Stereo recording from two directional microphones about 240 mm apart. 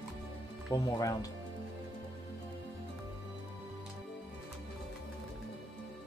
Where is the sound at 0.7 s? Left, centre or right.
Centre.